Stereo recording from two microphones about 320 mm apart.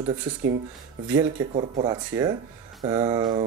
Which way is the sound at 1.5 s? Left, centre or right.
Centre.